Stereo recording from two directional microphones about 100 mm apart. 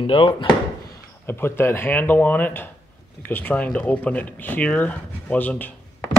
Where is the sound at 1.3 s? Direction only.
25° left (ahead or behind).